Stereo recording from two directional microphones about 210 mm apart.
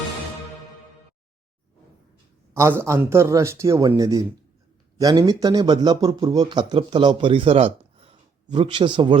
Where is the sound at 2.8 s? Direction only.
10° right (ahead or behind).